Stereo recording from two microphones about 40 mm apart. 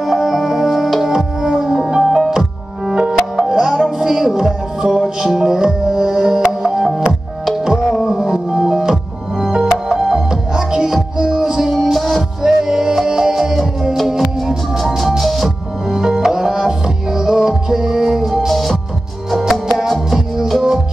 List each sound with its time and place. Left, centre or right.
0.0 s music: centre
15.9 s music: centre
19.9 s music: centre